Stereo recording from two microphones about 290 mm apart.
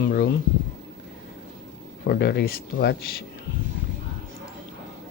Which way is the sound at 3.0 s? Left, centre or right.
Left.